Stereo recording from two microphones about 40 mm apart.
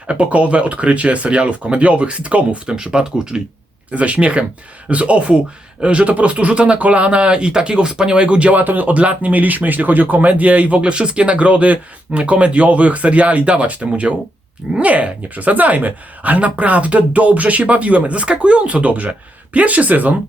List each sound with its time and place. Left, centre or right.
0.1 s speech: right
2.6 s speech: right
3.9 s speech: right
8.6 s speech: right